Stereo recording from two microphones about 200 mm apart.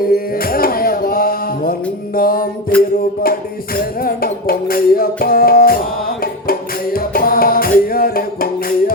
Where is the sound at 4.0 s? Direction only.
45° left (ahead or behind).